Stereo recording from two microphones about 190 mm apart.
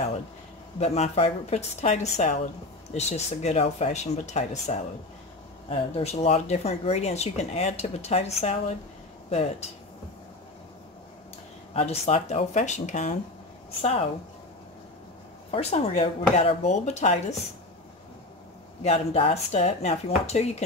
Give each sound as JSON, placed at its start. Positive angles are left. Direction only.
{"t": 0.7, "sound": "speech", "side_deg": 35}
{"t": 11.7, "sound": "speech", "side_deg": 30}
{"t": 15.5, "sound": "speech", "side_deg": 35}
{"t": 18.8, "sound": "speech", "side_deg": 30}